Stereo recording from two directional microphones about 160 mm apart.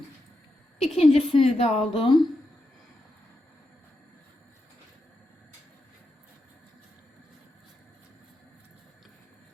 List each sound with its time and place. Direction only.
0.8 s a woman's voice: 40° left (ahead or behind)